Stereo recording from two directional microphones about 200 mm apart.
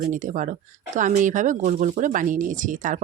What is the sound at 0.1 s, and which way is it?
Speech, 40° right (ahead or behind).